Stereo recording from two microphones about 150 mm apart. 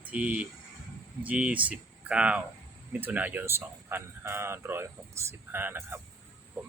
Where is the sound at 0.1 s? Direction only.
10° right (ahead or behind).